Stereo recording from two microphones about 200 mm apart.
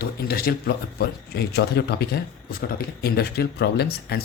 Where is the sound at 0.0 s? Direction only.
50° left (ahead or behind).